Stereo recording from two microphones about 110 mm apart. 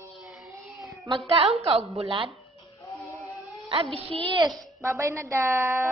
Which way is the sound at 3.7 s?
60° right (ahead or behind).